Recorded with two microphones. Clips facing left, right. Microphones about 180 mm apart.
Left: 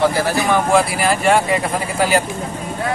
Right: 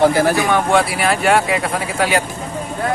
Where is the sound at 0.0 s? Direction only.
45° right (ahead or behind).